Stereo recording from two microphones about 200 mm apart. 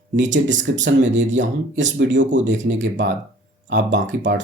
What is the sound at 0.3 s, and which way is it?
Speech, 65° right (ahead or behind).